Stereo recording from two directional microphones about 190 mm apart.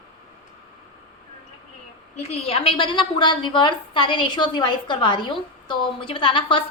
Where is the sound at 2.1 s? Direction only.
35° left (ahead or behind).